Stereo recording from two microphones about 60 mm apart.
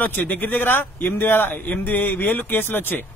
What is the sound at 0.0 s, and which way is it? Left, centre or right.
A man's voice, left.